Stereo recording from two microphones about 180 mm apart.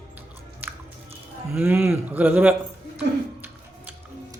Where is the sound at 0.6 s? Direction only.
10° right (ahead or behind).